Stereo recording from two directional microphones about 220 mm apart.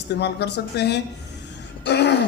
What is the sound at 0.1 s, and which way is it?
Speech, 50° left (ahead or behind).